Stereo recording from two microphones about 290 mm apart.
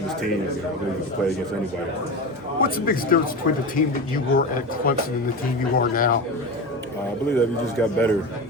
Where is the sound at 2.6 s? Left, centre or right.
Left.